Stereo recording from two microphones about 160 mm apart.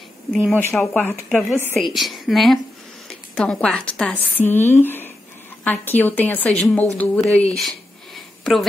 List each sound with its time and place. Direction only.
0.3 s a woman's voice: centre (ahead or behind)